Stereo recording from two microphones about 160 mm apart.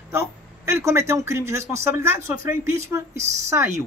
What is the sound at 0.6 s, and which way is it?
Speech, 15° right (ahead or behind).